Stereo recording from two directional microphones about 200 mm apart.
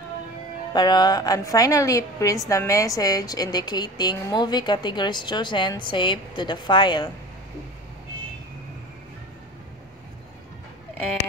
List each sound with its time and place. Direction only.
0.7 s a woman's voice: 20° left (ahead or behind)